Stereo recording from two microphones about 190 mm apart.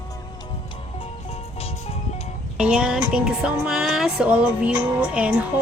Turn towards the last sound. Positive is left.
turn(degrees=-5)  # may be behind; listen again after turning